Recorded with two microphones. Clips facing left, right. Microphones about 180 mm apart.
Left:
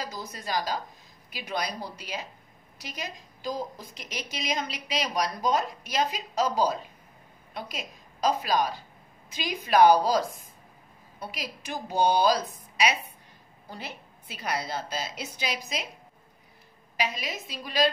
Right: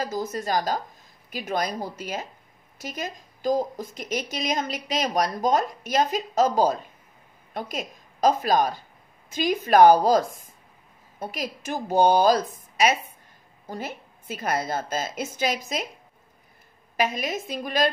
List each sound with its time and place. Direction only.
0.0 s a woman's voice: 45° right (ahead or behind)
16.9 s a woman's voice: 50° right (ahead or behind)